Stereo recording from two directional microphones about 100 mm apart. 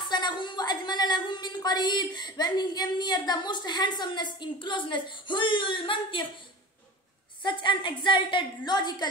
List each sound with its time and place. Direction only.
0.1 s a woman's voice: 50° left (ahead or behind)
7.4 s a woman's voice: 55° left (ahead or behind)